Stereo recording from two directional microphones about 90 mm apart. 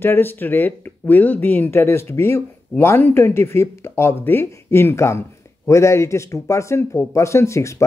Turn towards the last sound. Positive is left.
turn(degrees=30)  # may be behind; listen again after turning